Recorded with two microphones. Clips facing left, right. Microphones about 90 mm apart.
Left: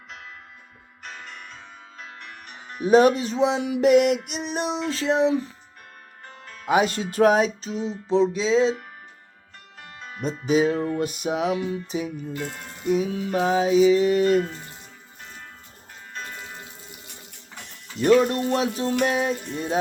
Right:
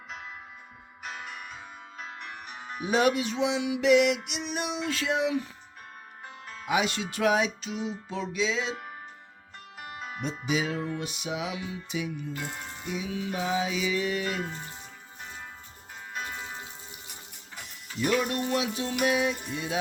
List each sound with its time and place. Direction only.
1.0 s music: 5° right (ahead or behind)
2.8 s music: 40° left (ahead or behind)
6.2 s music: 10° right (ahead or behind)
6.7 s music: 40° left (ahead or behind)
9.8 s music: 10° right (ahead or behind)
10.5 s music: 40° left (ahead or behind)
12.3 s speech: 5° right (ahead or behind)
12.9 s music: 45° left (ahead or behind)
14.4 s music: 5° right (ahead or behind)
18.0 s music: 35° left (ahead or behind)